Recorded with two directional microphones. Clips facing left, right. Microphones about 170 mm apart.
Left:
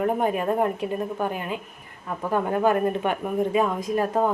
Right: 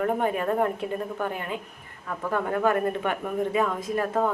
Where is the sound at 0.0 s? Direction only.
15° left (ahead or behind).